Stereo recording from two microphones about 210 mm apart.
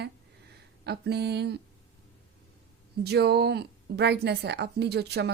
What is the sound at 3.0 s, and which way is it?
A woman's voice, 50° right (ahead or behind).